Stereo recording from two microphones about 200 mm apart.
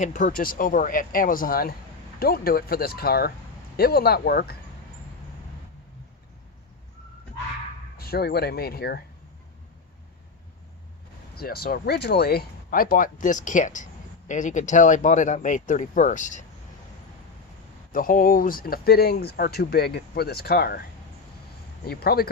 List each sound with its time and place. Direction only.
0.0 s speech: 40° left (ahead or behind)
7.9 s speech: 50° left (ahead or behind)
11.3 s speech: 50° left (ahead or behind)
17.9 s speech: 45° left (ahead or behind)
21.8 s speech: 50° left (ahead or behind)